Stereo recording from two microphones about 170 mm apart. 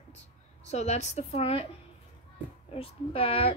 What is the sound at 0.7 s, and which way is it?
Speech, 40° left (ahead or behind).